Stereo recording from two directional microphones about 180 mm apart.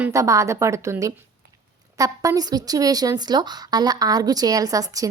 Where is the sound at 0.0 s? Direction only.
15° right (ahead or behind).